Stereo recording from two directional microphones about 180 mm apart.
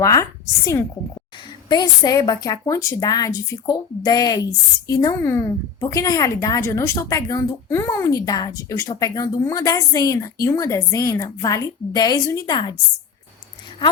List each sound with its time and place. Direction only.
0.0 s a woman's voice: 15° left (ahead or behind)